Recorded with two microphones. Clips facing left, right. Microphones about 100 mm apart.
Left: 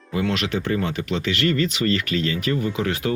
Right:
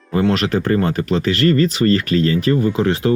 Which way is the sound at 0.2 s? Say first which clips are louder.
Right 7 dB; 40° right (ahead or behind).